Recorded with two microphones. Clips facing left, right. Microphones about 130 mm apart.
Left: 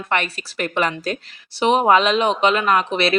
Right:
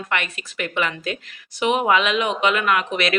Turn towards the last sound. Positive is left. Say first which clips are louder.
# left 3 dB
turn(degrees=30)  # may be behind; listen again after turning